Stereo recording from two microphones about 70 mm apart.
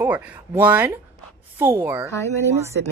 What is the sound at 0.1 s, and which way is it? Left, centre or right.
Speech, right.